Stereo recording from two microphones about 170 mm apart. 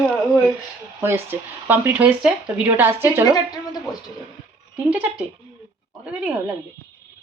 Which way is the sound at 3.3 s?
25° left (ahead or behind).